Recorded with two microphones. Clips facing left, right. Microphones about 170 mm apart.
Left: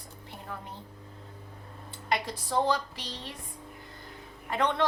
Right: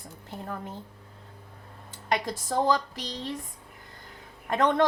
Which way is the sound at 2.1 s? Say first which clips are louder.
Right 2 dB; 45° right (ahead or behind).